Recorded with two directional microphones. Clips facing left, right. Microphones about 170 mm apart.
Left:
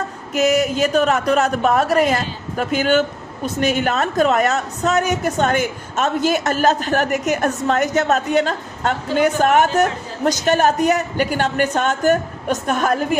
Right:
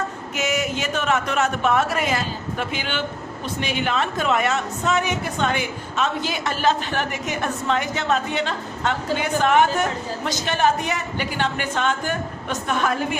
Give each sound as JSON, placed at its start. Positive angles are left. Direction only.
{"t": 0.3, "sound": "a woman's voice", "side_deg": 40}